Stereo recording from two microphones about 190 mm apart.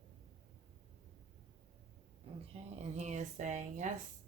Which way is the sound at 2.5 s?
35° right (ahead or behind).